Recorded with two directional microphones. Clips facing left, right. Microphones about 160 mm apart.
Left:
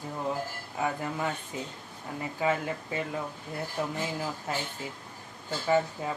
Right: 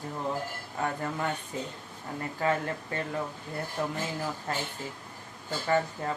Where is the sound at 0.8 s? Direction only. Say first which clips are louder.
Left 1 dB; 5° left (ahead or behind).